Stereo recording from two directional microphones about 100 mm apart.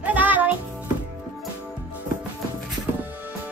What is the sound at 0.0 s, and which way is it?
Music, 15° right (ahead or behind).